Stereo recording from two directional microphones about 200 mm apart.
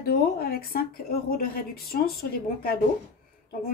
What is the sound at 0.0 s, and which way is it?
A woman's voice, 50° left (ahead or behind).